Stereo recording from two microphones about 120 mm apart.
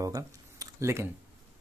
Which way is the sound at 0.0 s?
30° right (ahead or behind).